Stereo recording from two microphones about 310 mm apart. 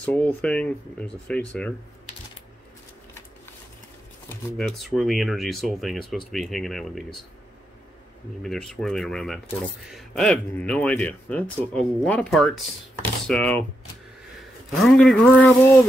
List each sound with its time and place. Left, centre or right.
0.0 s speech: centre
4.3 s speech: centre
8.4 s speech: centre
14.8 s speech: centre